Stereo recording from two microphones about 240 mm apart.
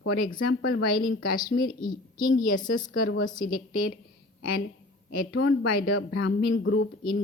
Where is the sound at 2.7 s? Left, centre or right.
Left.